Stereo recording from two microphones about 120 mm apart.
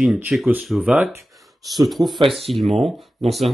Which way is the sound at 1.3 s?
Centre (ahead or behind).